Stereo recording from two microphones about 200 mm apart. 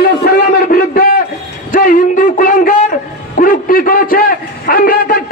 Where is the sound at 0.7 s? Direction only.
50° left (ahead or behind).